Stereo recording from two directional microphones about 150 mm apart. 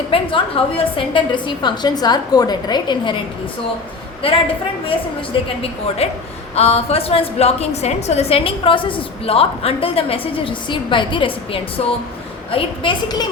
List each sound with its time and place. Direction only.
0.1 s a woman's voice: 35° left (ahead or behind)
4.2 s a woman's voice: 35° left (ahead or behind)
6.0 s a man's voice: 45° left (ahead or behind)